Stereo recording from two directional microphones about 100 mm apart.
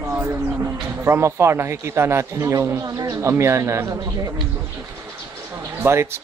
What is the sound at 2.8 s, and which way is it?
Speech, 40° right (ahead or behind).